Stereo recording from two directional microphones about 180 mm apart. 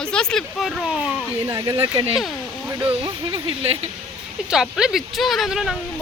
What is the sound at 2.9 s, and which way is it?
Speech, 30° right (ahead or behind).